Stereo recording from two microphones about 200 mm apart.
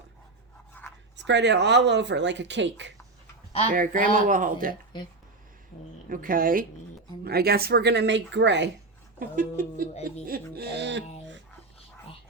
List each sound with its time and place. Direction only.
0.7 s a sound: 10° left (ahead or behind)
1.1 s speech: 60° right (ahead or behind)
3.7 s speech: 45° right (ahead or behind)
6.1 s speech: 45° right (ahead or behind)
9.1 s speech: 40° right (ahead or behind); by 11.0 s 60° right (ahead or behind)